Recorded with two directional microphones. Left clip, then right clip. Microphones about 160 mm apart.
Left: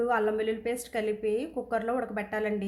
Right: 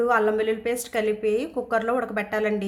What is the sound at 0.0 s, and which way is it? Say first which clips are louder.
A woman's voice: right 6 dB; centre (ahead or behind).